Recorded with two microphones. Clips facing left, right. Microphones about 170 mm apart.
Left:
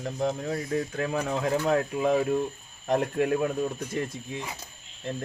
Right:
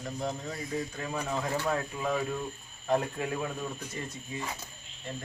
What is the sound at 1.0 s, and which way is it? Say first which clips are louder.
Speech: left 7 dB; 80° left.